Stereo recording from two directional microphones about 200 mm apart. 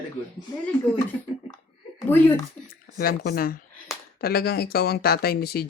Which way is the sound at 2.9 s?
50° left (ahead or behind).